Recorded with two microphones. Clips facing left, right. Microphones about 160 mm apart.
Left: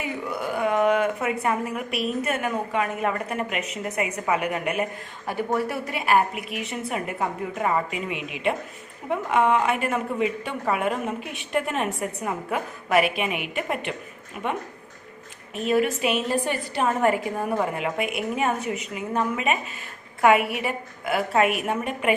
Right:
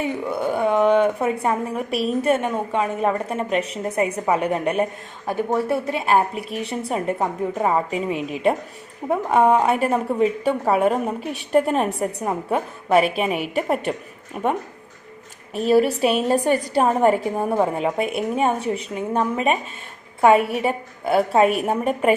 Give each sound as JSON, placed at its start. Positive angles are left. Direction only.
{"t": 0.0, "sound": "a woman's voice", "side_deg": -25}
{"t": 5.2, "sound": "a woman's voice", "side_deg": -20}
{"t": 15.5, "sound": "a woman's voice", "side_deg": -35}